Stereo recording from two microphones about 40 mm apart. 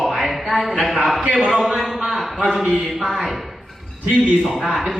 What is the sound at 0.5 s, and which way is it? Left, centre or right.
A man's voice, centre.